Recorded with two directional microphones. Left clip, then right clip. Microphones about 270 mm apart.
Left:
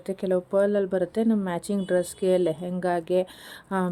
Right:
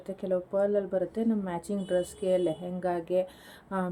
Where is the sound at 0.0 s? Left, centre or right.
Left.